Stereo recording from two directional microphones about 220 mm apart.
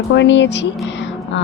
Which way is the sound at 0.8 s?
55° left (ahead or behind).